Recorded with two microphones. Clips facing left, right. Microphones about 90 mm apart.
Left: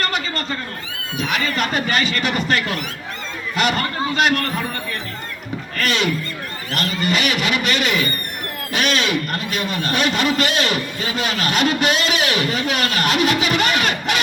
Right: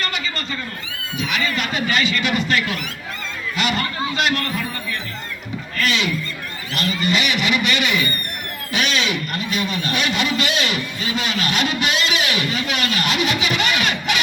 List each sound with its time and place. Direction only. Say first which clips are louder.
0.0 s a sound: left 3 dB; 45° left (ahead or behind)
1.2 s speech: left 2 dB; 40° left (ahead or behind)
5.7 s speech: left 1 dB; 45° left (ahead or behind)